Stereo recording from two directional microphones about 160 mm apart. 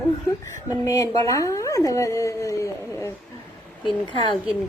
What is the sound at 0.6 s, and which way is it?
A woman's voice, 20° left (ahead or behind).